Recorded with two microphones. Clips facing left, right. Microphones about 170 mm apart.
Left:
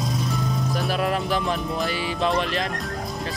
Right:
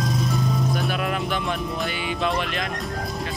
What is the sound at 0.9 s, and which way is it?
Speech, 35° left (ahead or behind).